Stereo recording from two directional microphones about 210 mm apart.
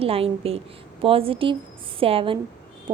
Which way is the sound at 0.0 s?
25° right (ahead or behind).